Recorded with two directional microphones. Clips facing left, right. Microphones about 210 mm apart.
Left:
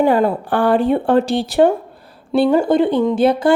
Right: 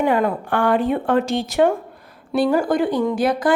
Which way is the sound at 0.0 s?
30° left (ahead or behind).